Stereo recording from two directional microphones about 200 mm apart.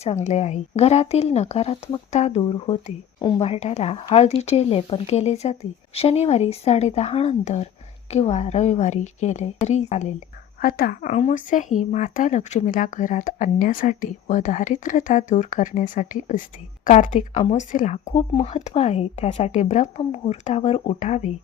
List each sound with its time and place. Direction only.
0.0 s speech: 35° left (ahead or behind)
10.6 s a woman's voice: 45° left (ahead or behind)
11.1 s speech: 35° left (ahead or behind)